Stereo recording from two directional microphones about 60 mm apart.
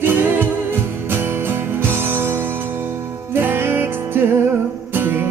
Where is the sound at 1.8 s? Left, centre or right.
Right.